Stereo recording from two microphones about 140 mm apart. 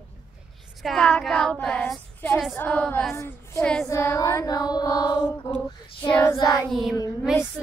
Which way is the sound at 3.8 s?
20° left (ahead or behind).